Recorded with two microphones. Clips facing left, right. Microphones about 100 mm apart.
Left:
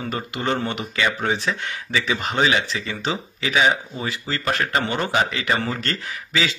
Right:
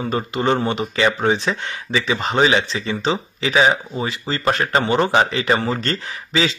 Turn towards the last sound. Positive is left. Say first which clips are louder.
# right 4 dB
turn(degrees=-30)  # may be behind; listen again after turning